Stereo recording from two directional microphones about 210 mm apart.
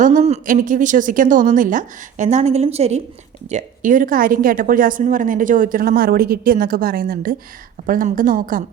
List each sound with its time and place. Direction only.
0.0 s a woman's voice: 35° right (ahead or behind)